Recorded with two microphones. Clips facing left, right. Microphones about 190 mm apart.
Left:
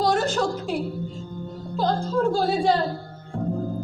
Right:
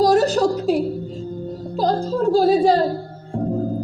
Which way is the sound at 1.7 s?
35° right (ahead or behind).